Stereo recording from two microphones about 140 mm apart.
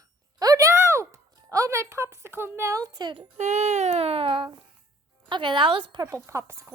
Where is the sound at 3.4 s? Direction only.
55° right (ahead or behind); by 6.1 s 35° right (ahead or behind).